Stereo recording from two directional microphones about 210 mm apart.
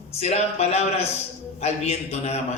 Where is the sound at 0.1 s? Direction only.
30° left (ahead or behind).